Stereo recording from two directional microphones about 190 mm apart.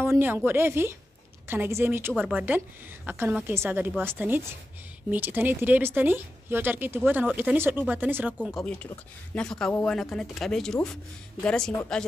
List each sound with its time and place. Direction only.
0.0 s speech: 10° right (ahead or behind)
8.5 s speech: centre (ahead or behind)